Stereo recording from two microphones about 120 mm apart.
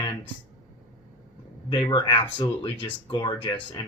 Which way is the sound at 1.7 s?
40° left (ahead or behind).